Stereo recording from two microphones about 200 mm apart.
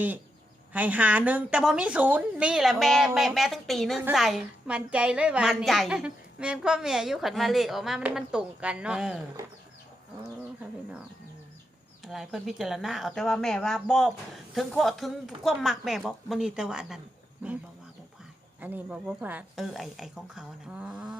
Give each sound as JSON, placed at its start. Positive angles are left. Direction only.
{"t": 0.7, "sound": "a woman's voice", "side_deg": -10}
{"t": 12.0, "sound": "a woman's voice", "side_deg": 0}
{"t": 18.6, "sound": "a woman's voice", "side_deg": -5}